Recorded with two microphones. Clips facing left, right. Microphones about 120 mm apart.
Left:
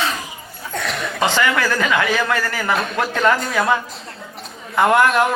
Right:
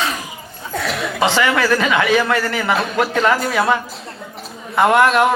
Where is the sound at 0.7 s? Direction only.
Centre (ahead or behind).